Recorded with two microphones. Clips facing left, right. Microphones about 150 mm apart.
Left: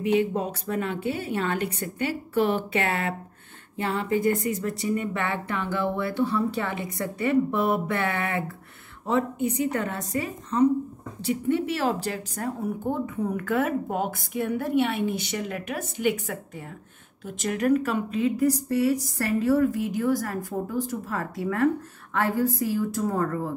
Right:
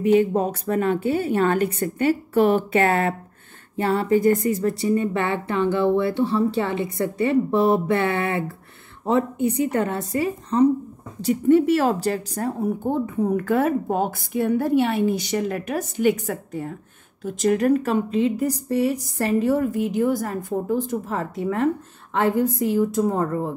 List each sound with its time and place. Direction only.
0.0 s a woman's voice: 45° right (ahead or behind); by 23.5 s 20° right (ahead or behind)